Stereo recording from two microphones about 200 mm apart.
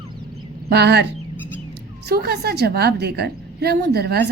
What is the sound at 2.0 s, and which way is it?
A woman's voice, 55° right (ahead or behind).